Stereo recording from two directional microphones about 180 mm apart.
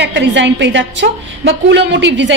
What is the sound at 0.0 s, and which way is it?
Speech, 85° right.